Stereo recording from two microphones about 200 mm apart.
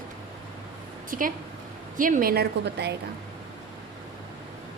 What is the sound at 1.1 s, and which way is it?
A woman's voice, 45° right (ahead or behind).